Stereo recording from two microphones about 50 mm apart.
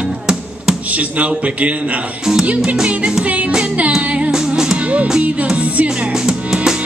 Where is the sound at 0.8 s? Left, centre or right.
Right.